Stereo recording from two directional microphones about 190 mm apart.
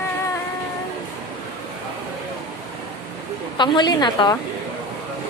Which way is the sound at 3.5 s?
25° left (ahead or behind).